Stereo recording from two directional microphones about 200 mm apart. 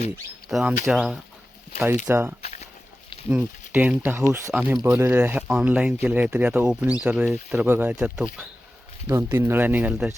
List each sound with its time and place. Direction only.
0.4 s speech: 5° right (ahead or behind)
2.0 s speech: 10° right (ahead or behind)
2.4 s a sound: 35° left (ahead or behind)
3.2 s speech: 10° right (ahead or behind)